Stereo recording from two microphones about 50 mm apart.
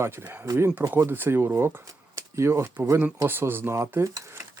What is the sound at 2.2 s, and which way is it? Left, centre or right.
Speech, right.